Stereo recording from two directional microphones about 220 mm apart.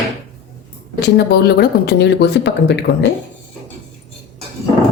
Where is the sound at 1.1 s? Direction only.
50° left (ahead or behind).